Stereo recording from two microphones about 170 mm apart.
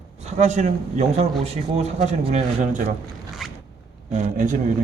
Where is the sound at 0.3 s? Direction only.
45° right (ahead or behind).